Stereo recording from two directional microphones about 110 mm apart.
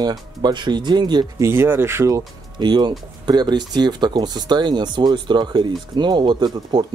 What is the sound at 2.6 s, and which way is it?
Speech, 40° right (ahead or behind).